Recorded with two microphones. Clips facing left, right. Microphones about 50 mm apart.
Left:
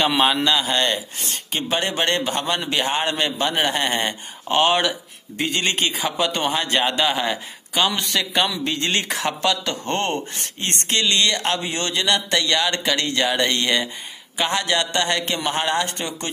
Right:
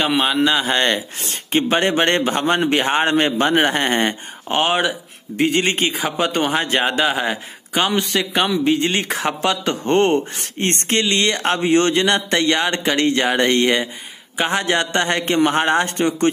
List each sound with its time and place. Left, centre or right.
0.0 s speech: centre
0.6 s a man's voice: right; by 9.0 s centre
9.4 s a man's voice: right
10.3 s speech: right